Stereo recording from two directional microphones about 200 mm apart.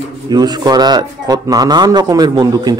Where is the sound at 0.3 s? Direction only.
20° right (ahead or behind).